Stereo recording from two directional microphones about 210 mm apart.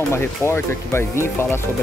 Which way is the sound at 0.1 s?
10° left (ahead or behind).